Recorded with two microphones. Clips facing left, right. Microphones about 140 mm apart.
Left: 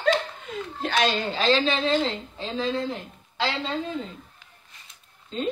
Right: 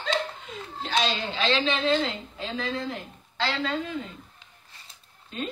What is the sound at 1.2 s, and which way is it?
A woman's voice, 40° left (ahead or behind).